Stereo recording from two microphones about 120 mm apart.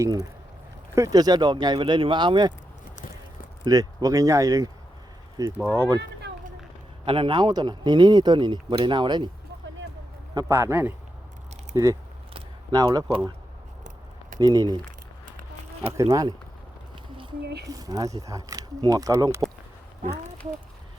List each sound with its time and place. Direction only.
0.0 s a man's voice: 30° right (ahead or behind)
3.6 s speech: 30° right (ahead or behind)
5.6 s speech: 10° left (ahead or behind)
7.0 s a man's voice: 45° right (ahead or behind)
10.5 s a man's voice: 20° right (ahead or behind)
14.3 s a man's voice: 30° right (ahead or behind)
15.9 s speech: 30° right (ahead or behind)
17.7 s speech: 30° right (ahead or behind)